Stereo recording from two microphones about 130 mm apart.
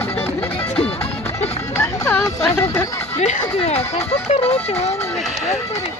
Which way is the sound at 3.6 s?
50° left (ahead or behind).